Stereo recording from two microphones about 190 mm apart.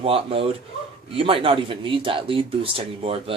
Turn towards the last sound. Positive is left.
turn(degrees=-30)  # may be behind; listen again after turning